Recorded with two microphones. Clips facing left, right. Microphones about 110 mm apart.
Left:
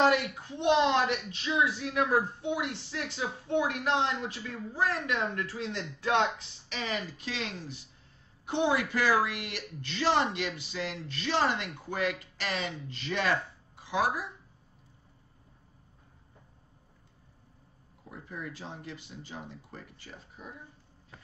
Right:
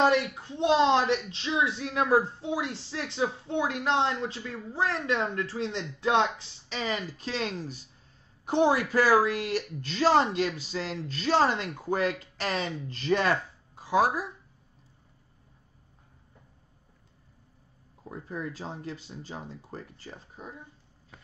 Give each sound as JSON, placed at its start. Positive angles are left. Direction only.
{"t": 0.0, "sound": "speech", "side_deg": -30}
{"t": 18.0, "sound": "speech", "side_deg": -35}